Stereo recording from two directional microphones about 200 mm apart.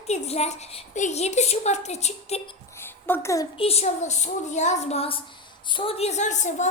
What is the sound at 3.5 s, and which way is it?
A woman's voice, 30° left (ahead or behind).